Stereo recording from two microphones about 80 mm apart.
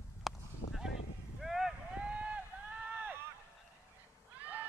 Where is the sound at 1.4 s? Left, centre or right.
Centre.